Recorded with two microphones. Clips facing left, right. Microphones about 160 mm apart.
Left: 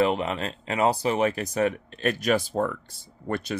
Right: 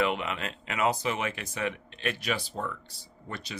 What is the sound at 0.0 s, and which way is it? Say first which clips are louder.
Speech: left 5 dB; 35° left (ahead or behind).